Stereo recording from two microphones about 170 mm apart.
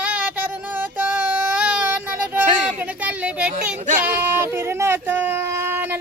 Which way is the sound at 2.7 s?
10° right (ahead or behind).